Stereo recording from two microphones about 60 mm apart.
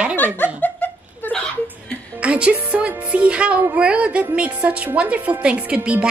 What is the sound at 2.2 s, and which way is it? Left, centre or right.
A woman's voice, centre.